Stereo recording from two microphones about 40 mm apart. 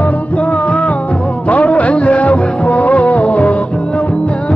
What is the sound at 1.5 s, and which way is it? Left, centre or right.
Music, left.